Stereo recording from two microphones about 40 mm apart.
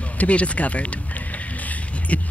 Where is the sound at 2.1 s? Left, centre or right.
Left.